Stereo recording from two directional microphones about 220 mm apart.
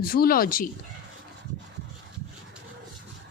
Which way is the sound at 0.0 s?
40° left (ahead or behind).